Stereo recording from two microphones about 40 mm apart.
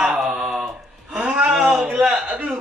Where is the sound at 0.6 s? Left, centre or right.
Right.